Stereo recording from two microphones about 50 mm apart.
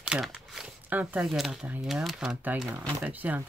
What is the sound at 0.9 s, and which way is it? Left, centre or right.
Speech, right.